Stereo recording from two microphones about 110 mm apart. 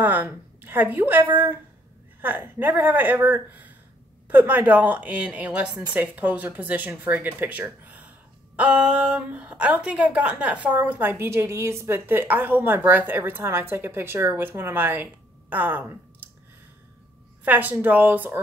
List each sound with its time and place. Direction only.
0.0 s a woman's voice: 15° right (ahead or behind)
17.5 s a woman's voice: 15° right (ahead or behind)